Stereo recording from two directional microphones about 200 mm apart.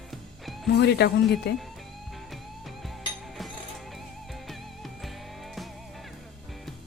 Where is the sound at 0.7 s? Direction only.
55° left (ahead or behind).